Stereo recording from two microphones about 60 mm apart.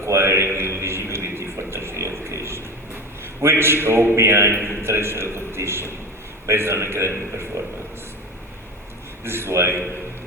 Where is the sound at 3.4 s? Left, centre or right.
Right.